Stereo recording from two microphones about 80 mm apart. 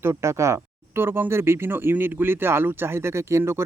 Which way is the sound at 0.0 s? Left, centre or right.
Right.